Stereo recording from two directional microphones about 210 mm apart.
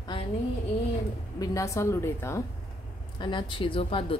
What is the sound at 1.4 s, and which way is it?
A woman's voice, 15° left (ahead or behind).